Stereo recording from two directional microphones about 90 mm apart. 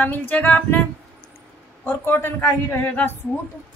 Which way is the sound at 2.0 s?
25° left (ahead or behind).